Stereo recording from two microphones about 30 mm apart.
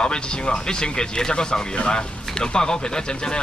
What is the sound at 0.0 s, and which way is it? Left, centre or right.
Speech, left.